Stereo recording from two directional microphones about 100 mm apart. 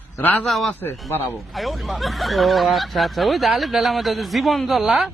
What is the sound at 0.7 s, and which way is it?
Speech, 20° left (ahead or behind).